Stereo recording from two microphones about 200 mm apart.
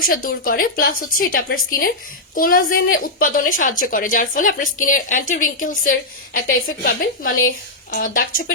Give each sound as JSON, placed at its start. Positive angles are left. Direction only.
{"t": 0.1, "sound": "a woman's voice", "side_deg": 45}